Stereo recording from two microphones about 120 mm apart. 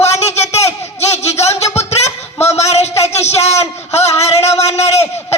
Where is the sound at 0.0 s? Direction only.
65° left (ahead or behind).